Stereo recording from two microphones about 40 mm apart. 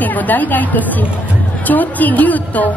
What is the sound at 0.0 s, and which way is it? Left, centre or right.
A woman's voice, left.